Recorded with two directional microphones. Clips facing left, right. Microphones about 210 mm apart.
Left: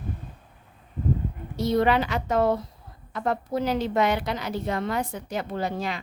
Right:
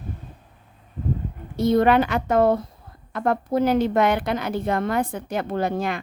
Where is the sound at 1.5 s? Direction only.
55° right (ahead or behind).